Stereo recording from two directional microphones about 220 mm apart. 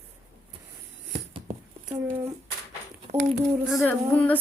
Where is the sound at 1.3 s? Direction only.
20° right (ahead or behind).